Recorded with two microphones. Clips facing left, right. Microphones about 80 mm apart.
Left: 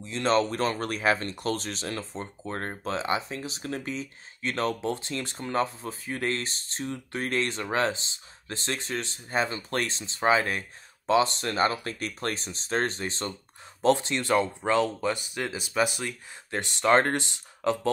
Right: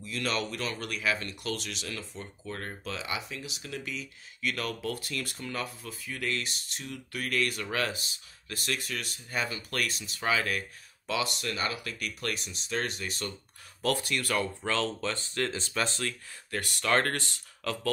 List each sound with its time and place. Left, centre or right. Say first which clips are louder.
0.0 s speech: left 8 dB; left